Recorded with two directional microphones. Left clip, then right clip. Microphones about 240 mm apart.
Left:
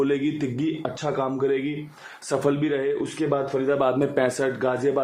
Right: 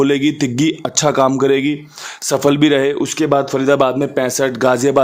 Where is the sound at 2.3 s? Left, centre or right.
Right.